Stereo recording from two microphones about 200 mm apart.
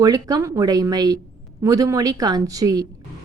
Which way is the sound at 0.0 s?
20° right (ahead or behind).